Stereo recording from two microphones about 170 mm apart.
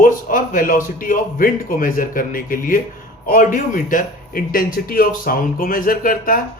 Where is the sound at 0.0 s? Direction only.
55° left (ahead or behind).